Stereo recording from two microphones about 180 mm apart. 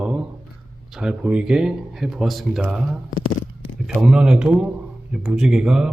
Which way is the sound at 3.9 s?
5° right (ahead or behind).